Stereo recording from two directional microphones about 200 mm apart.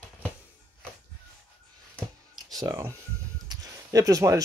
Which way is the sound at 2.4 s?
20° right (ahead or behind).